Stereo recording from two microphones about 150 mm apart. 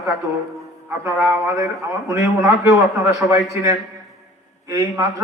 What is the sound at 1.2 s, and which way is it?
Speech, centre (ahead or behind).